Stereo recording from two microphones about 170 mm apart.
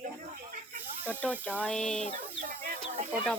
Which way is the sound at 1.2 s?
5° left (ahead or behind).